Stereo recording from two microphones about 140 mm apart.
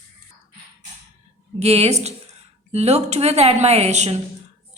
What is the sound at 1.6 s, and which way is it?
A woman's voice, 50° right (ahead or behind).